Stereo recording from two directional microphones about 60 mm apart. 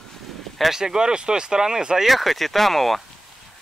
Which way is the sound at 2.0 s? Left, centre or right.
Centre.